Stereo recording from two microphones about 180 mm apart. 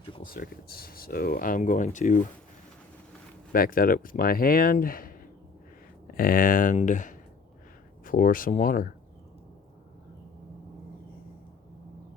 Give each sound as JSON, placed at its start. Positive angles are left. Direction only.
{"t": 0.2, "sound": "speech", "side_deg": 55}
{"t": 3.5, "sound": "speech", "side_deg": 55}
{"t": 6.1, "sound": "speech", "side_deg": 50}